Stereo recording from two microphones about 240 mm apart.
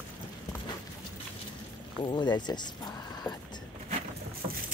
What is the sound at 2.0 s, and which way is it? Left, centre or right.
Speech, centre.